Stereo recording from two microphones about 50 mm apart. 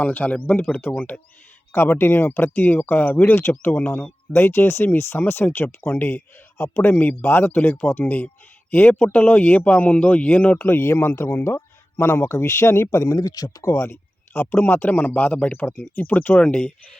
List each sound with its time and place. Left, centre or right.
0.0 s speech: left
0.9 s speech: left
1.7 s speech: left
4.3 s speech: left
6.1 s speech: left
10.7 s speech: left
13.6 s speech: left; by 17.0 s centre